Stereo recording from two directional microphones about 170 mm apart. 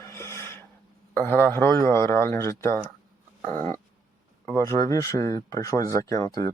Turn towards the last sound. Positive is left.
turn(degrees=20)  # may be behind; listen again after turning